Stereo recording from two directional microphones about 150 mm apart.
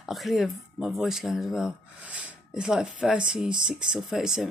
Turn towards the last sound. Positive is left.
turn(degrees=-5)  # may be behind; listen again after turning